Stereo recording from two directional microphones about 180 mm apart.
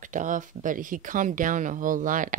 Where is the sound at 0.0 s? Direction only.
45° right (ahead or behind).